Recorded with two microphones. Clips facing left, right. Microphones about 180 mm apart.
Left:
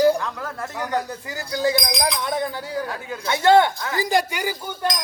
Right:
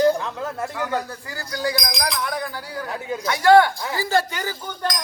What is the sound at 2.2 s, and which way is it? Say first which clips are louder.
A man's voice: left 3 dB; 25° left (ahead or behind).